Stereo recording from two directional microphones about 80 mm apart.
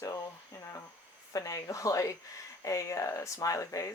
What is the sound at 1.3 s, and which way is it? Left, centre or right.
Speech, left.